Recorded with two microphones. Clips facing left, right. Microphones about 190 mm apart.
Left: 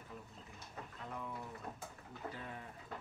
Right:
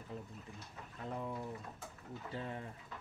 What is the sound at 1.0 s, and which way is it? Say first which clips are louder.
Speech: right 5 dB; 35° right (ahead or behind).